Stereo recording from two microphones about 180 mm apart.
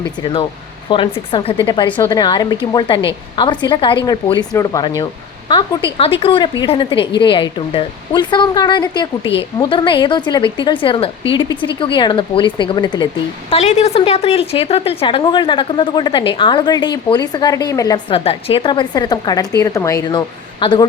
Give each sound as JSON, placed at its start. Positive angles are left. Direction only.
{"t": 0.9, "sound": "a woman's voice", "side_deg": 30}
{"t": 13.5, "sound": "a woman's voice", "side_deg": 35}